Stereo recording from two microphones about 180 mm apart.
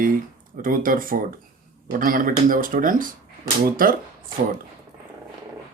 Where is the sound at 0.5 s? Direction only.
50° right (ahead or behind).